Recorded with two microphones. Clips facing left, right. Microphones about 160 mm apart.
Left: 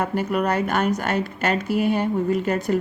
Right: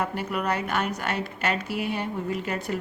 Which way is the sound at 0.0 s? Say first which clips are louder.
Left 6 dB; 45° left (ahead or behind).